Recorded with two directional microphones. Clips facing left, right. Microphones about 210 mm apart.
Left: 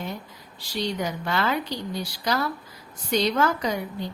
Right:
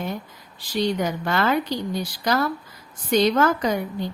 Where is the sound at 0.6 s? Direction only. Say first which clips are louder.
Right 5 dB; 50° right (ahead or behind).